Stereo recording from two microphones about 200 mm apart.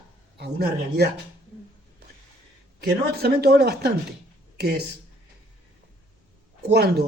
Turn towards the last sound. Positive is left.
turn(degrees=-55)  # may be behind; listen again after turning